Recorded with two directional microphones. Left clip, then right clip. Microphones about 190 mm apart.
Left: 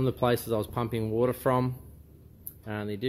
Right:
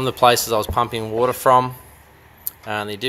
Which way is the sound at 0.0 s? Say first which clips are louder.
Right 12 dB; 35° right (ahead or behind).